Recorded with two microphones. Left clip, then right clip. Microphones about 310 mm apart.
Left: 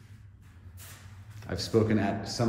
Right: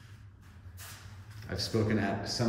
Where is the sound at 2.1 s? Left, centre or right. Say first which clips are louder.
Left 1 dB; centre.